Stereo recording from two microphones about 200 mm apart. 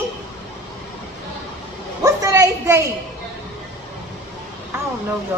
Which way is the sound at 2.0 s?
15° right (ahead or behind).